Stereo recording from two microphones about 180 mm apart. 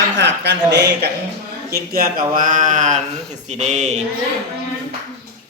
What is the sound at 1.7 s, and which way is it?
Speech, 55° right (ahead or behind).